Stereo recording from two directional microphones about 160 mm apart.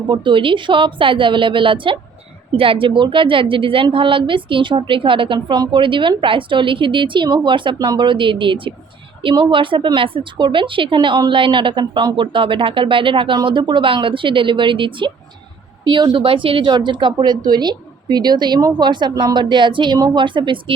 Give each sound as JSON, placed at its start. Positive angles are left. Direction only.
{"t": 0.1, "sound": "a woman's voice", "side_deg": -30}